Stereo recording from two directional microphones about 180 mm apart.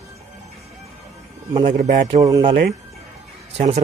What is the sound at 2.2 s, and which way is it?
Speech, 20° right (ahead or behind).